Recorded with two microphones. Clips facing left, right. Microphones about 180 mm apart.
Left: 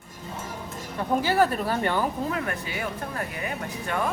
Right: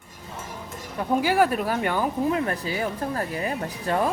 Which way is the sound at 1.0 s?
10° right (ahead or behind).